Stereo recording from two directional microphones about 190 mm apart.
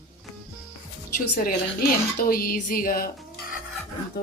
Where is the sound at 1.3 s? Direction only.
50° left (ahead or behind).